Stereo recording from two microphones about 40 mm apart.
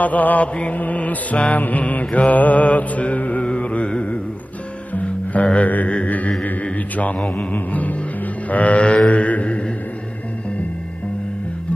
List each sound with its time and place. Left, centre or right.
0.0 s mantra: left
3.4 s music: left
6.4 s a sound: left
7.2 s mantra: left